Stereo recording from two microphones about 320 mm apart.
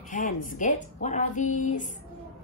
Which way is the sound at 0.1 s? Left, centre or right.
Left.